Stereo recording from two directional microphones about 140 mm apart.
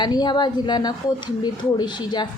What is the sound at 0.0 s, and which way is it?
A woman's voice, 30° left (ahead or behind).